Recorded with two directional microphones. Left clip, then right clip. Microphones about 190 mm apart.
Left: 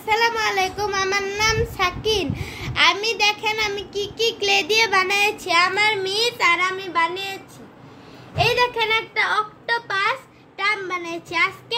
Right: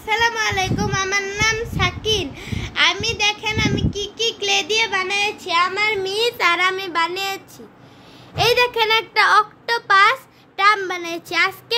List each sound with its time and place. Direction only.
0.0 s a child's voice: 5° left (ahead or behind)
5.9 s speech: 30° right (ahead or behind)
6.2 s child singing: 45° right (ahead or behind)
8.4 s a child's voice: 40° right (ahead or behind)